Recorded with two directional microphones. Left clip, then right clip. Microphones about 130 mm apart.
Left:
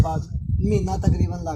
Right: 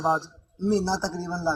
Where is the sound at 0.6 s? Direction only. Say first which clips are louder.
Even; centre (ahead or behind).